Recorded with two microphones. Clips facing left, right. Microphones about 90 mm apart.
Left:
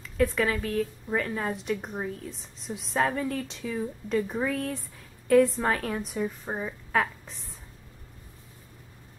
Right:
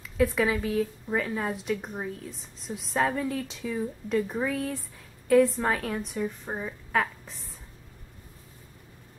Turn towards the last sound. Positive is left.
turn(degrees=0)  # may be behind; listen again after turning